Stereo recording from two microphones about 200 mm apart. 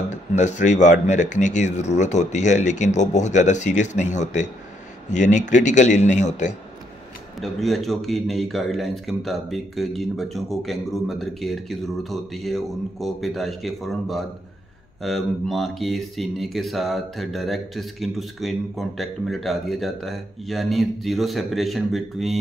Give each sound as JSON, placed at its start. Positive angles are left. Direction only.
{"t": 0.4, "sound": "speech", "side_deg": 35}
{"t": 7.3, "sound": "speech", "side_deg": 0}